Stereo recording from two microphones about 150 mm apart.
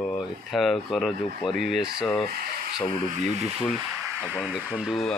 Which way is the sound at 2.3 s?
90° right.